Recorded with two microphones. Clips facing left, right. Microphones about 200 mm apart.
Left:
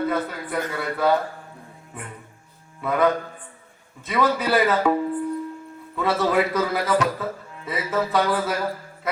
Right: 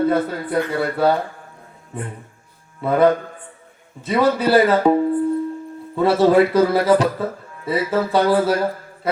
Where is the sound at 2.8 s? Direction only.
30° right (ahead or behind).